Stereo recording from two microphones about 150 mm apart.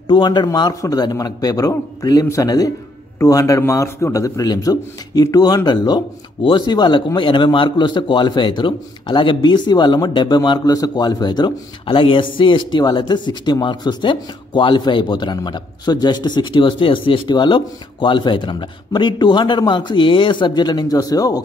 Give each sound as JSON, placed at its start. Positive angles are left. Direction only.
{"t": 0.1, "sound": "a man's voice", "side_deg": 30}